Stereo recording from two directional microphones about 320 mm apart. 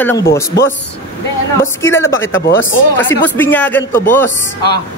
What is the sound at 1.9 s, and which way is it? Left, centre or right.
Speech, centre.